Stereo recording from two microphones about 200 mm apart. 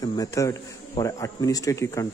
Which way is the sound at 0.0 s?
20° left (ahead or behind).